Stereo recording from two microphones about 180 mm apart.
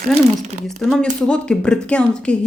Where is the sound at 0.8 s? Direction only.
5° left (ahead or behind).